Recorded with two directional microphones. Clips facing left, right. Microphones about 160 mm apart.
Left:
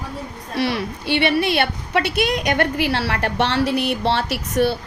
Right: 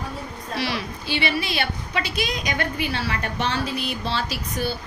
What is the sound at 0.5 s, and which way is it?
A woman's voice, 55° left (ahead or behind).